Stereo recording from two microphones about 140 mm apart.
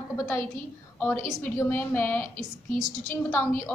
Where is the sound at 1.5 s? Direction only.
15° left (ahead or behind).